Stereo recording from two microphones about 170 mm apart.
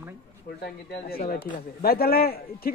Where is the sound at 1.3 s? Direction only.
60° left (ahead or behind).